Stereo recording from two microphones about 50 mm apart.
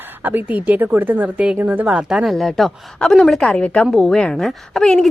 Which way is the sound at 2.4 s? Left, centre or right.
Centre.